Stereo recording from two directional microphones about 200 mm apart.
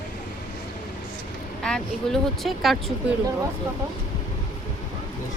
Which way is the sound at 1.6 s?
Centre (ahead or behind).